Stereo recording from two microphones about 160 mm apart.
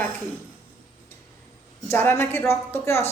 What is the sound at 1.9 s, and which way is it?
A woman's voice, 15° left (ahead or behind).